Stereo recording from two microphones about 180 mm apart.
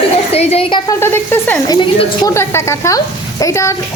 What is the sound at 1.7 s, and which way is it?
Speech, 25° left (ahead or behind).